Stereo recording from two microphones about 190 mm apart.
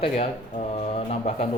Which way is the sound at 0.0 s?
30° left (ahead or behind).